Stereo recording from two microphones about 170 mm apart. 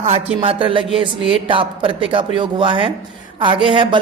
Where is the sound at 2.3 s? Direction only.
30° right (ahead or behind).